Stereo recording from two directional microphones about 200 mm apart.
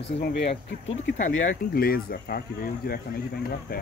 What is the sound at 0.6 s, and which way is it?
Speech, 65° left (ahead or behind).